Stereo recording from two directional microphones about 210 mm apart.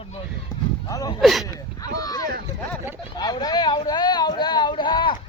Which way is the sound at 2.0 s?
15° left (ahead or behind).